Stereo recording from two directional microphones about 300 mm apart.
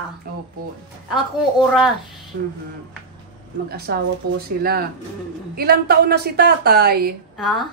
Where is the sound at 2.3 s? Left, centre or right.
Right.